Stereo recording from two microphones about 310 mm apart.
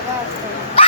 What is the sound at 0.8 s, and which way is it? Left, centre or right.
Dog, centre.